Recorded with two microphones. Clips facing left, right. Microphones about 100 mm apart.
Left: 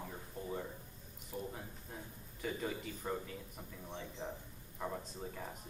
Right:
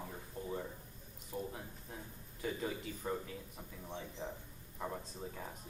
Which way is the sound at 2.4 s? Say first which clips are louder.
Even; 5° right (ahead or behind).